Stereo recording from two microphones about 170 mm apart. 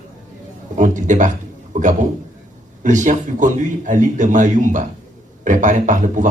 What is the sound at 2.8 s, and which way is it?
A man's voice, 50° right (ahead or behind).